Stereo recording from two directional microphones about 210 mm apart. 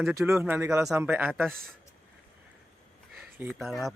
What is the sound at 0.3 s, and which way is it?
Speech, 10° right (ahead or behind).